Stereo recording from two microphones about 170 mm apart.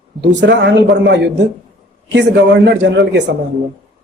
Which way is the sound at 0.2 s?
90° right.